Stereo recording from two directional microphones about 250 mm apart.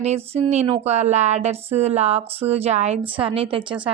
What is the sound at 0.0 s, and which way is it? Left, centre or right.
A woman's voice, right.